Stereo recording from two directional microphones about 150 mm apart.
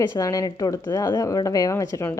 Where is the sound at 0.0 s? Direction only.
20° left (ahead or behind).